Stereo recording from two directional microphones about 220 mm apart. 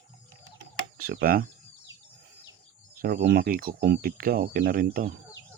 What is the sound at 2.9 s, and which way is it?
Speech, 40° right (ahead or behind).